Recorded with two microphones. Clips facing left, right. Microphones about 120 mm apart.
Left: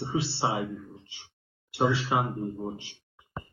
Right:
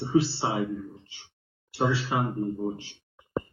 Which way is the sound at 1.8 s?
Centre (ahead or behind).